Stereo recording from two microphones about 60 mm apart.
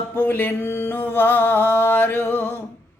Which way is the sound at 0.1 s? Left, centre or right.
Left.